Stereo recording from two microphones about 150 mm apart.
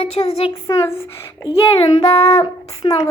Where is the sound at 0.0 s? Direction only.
45° left (ahead or behind).